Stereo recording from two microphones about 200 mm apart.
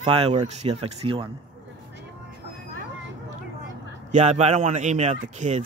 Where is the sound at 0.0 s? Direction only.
30° right (ahead or behind).